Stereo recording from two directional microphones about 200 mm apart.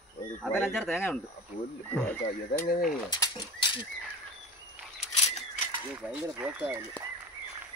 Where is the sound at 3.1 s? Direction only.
20° left (ahead or behind).